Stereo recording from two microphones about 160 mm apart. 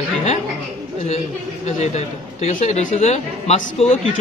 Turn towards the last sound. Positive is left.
turn(degrees=45)  # may be behind; listen again after turning